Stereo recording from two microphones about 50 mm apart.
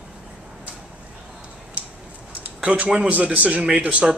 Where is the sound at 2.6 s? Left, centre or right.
Right.